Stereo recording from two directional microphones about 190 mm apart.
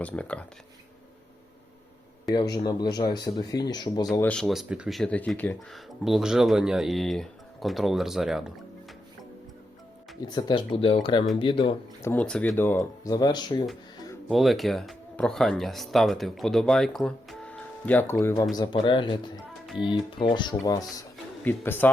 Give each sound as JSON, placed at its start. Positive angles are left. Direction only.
{"t": 0.0, "sound": "speech", "side_deg": 5}
{"t": 2.3, "sound": "speech", "side_deg": 20}
{"t": 4.1, "sound": "speech", "side_deg": 10}
{"t": 10.2, "sound": "speech", "side_deg": 25}
{"t": 12.0, "sound": "speech", "side_deg": 5}
{"t": 14.3, "sound": "speech", "side_deg": 0}
{"t": 18.5, "sound": "speech", "side_deg": 25}
{"t": 21.4, "sound": "speech", "side_deg": 10}